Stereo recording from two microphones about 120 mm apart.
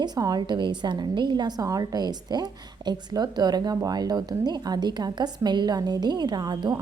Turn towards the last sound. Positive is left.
turn(degrees=-35)  # may be behind; listen again after turning